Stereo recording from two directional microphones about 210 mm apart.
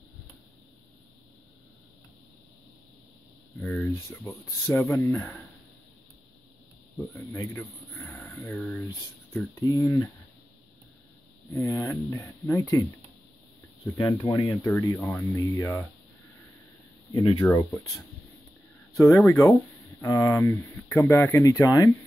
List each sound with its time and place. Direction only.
3.5 s speech: 10° left (ahead or behind)
7.0 s speech: 10° left (ahead or behind)
11.5 s speech: 15° left (ahead or behind)
13.8 s speech: 15° left (ahead or behind)
17.1 s speech: 20° left (ahead or behind)
18.9 s speech: 10° left (ahead or behind)